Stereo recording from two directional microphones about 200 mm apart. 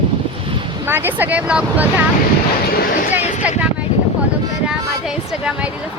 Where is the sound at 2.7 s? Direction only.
50° left (ahead or behind).